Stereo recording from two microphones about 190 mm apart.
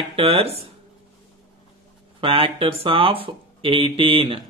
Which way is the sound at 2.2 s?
30° right (ahead or behind).